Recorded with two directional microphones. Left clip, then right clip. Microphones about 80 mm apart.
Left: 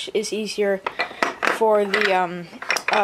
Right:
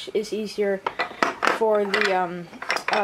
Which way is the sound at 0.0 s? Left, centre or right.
Left.